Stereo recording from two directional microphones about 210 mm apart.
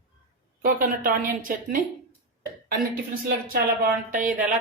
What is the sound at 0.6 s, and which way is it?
Speech, 45° right (ahead or behind).